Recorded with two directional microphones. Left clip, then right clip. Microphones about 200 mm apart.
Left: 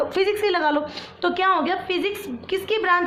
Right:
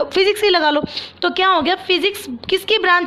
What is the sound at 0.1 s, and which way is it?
A woman's voice, 40° right (ahead or behind).